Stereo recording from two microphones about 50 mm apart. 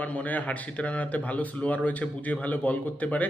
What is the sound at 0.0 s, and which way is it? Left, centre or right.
Speech, left.